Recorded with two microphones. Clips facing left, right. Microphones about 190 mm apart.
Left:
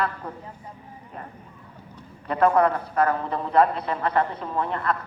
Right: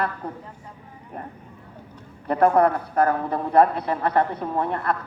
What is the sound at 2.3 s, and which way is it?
A man's voice, 55° right (ahead or behind).